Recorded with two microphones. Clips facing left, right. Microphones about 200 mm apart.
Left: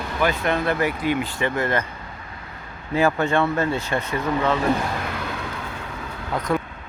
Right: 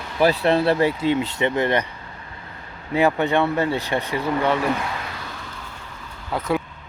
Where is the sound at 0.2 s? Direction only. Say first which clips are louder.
Right 5 dB; 35° right (ahead or behind).